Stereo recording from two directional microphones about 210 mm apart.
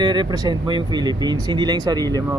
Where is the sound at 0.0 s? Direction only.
20° right (ahead or behind).